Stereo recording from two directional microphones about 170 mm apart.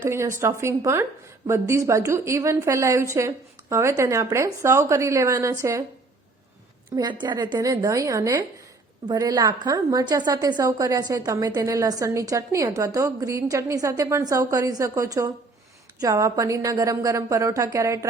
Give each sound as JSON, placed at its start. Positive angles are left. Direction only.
{"t": 0.0, "sound": "a woman's voice", "side_deg": -15}
{"t": 6.9, "sound": "a woman's voice", "side_deg": -25}